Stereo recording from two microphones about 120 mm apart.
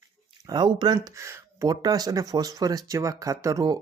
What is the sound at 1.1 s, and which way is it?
Speech, 25° right (ahead or behind).